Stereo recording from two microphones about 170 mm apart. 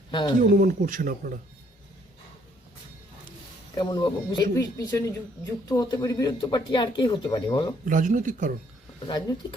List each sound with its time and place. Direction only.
0.1 s speech: 25° left (ahead or behind)
0.3 s speech: 50° right (ahead or behind)
3.8 s speech: 25° left (ahead or behind)
7.9 s speech: 50° right (ahead or behind)
9.0 s speech: 25° left (ahead or behind)